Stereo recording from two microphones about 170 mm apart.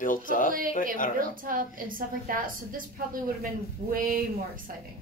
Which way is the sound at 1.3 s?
55° right (ahead or behind).